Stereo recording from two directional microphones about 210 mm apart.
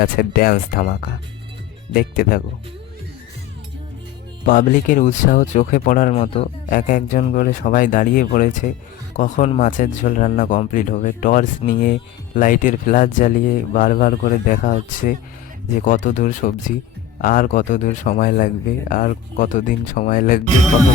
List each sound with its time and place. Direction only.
0.0 s speech: 45° left (ahead or behind)
4.4 s speech: 40° left (ahead or behind)